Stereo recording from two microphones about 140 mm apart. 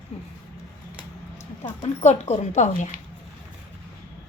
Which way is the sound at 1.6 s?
45° left (ahead or behind).